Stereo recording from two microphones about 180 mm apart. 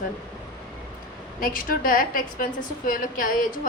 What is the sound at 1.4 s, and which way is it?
A woman's voice, 50° left (ahead or behind).